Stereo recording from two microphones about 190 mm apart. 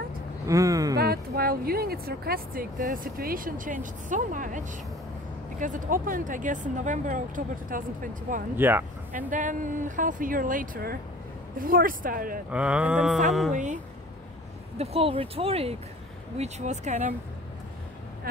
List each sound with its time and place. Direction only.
0.5 s speech: 15° right (ahead or behind)
0.9 s speech: 55° right (ahead or behind)
8.5 s speech: 10° right (ahead or behind)
9.1 s speech: 45° right (ahead or behind)
12.4 s speech: 5° right (ahead or behind)
13.5 s speech: 40° right (ahead or behind)
14.8 s speech: 30° right (ahead or behind)
18.3 s speech: 50° right (ahead or behind)